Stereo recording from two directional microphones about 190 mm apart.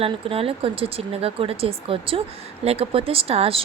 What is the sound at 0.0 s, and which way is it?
Speech, 30° right (ahead or behind).